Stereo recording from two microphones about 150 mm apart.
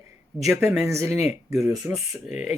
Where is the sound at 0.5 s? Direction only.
15° right (ahead or behind).